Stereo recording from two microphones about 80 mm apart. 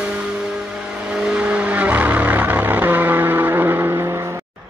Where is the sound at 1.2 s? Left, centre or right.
Centre.